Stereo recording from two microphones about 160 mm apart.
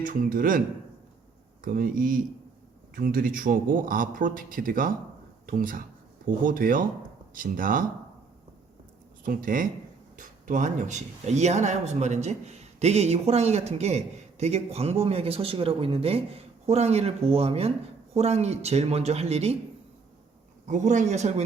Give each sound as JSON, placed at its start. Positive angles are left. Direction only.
{"t": 0.0, "sound": "speech", "side_deg": -60}
{"t": 1.6, "sound": "speech", "side_deg": -65}
{"t": 9.2, "sound": "speech", "side_deg": -60}
{"t": 20.7, "sound": "speech", "side_deg": -50}